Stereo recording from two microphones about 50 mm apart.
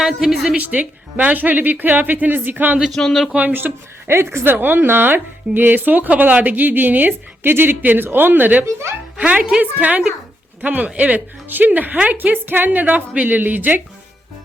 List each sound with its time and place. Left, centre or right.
0.0 s a woman's voice: centre
0.5 s speech: right
2.9 s speech: centre
3.3 s speech: right
4.2 s speech: right
4.5 s speech: right
8.6 s speech: right
9.1 s speech: right
12.8 s a man's voice: right
13.2 s speech: right